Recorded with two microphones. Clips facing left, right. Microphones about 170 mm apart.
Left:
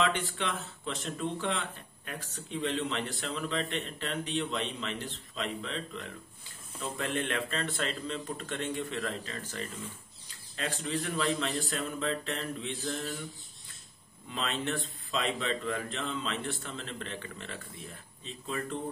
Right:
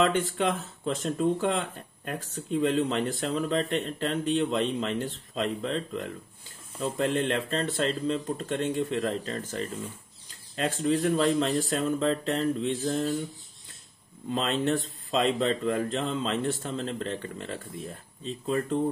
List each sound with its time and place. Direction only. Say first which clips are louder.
0.0 s speech: right 6 dB; 40° right (ahead or behind)
14.3 s speech: right 7 dB; 35° right (ahead or behind)